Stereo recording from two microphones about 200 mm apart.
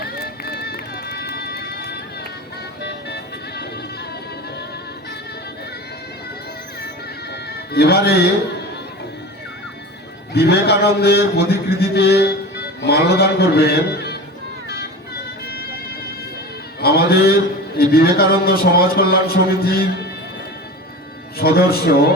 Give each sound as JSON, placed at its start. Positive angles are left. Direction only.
{"t": 0.0, "sound": "music", "side_deg": 50}
{"t": 7.5, "sound": "speech", "side_deg": 50}
{"t": 10.3, "sound": "a man's voice", "side_deg": 55}
{"t": 16.8, "sound": "a sound", "side_deg": 50}
{"t": 17.7, "sound": "a man's voice", "side_deg": 50}
{"t": 21.3, "sound": "a man's voice", "side_deg": 50}